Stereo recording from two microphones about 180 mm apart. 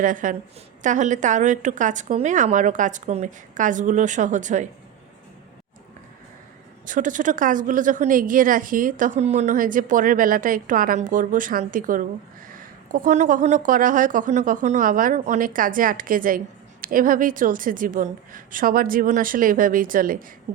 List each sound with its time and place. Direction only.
0.0 s a woman's voice: 45° right (ahead or behind)
6.8 s a woman's voice: 45° right (ahead or behind)